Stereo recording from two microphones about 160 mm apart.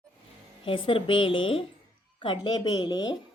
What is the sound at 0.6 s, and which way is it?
Speech, 35° left (ahead or behind).